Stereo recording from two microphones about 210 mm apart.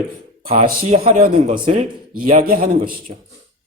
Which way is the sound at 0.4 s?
30° right (ahead or behind).